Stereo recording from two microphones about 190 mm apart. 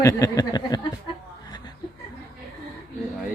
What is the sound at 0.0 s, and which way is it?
Speech, 15° left (ahead or behind).